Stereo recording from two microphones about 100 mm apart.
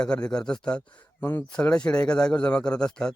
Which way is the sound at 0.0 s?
10° left (ahead or behind).